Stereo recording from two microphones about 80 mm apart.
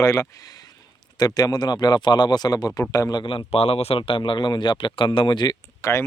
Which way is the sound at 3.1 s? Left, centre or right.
Left.